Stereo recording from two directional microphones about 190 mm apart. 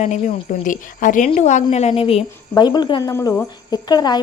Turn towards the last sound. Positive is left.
turn(degrees=20)  # may be behind; listen again after turning